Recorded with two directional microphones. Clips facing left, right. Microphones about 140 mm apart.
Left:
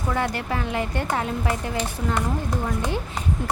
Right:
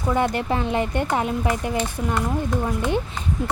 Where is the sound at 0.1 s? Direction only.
20° right (ahead or behind).